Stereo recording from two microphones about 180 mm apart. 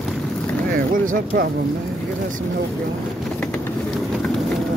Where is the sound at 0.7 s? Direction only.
55° right (ahead or behind).